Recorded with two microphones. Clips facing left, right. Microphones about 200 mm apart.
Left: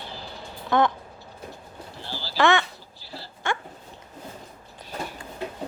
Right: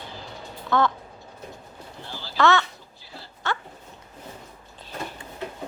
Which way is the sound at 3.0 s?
35° left (ahead or behind).